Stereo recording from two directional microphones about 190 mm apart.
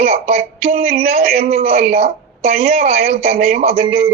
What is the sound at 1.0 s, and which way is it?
Speech, 35° right (ahead or behind).